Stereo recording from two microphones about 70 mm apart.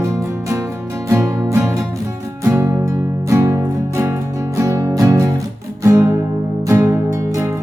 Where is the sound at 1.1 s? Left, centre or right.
Right.